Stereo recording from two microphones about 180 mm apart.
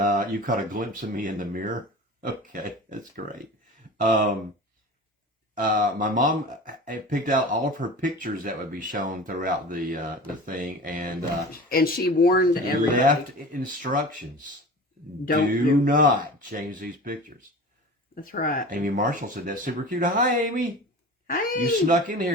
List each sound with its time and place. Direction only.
0.0 s speech: 50° right (ahead or behind)
5.5 s speech: 50° right (ahead or behind)
11.5 s speech: 55° left (ahead or behind)
12.9 s speech: 50° right (ahead or behind)
15.2 s speech: 50° left (ahead or behind)
15.8 s speech: 50° right (ahead or behind)
18.1 s speech: 50° left (ahead or behind)
18.7 s speech: 50° right (ahead or behind)
21.2 s speech: 50° left (ahead or behind)
21.8 s speech: 50° right (ahead or behind)